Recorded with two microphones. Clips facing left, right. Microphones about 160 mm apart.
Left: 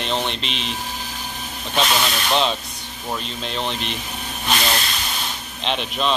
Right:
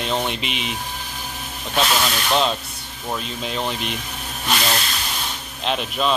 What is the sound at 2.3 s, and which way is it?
Speech, centre (ahead or behind).